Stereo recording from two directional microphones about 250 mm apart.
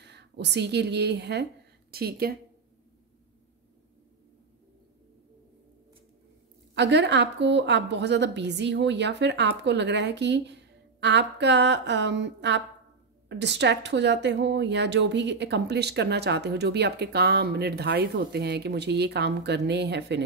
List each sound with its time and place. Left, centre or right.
0.0 s speech: right
6.7 s a woman's voice: right